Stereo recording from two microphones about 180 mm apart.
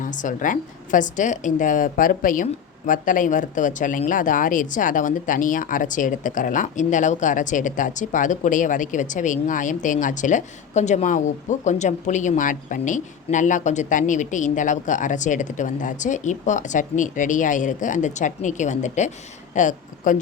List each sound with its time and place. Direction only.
0.0 s speech: 45° left (ahead or behind)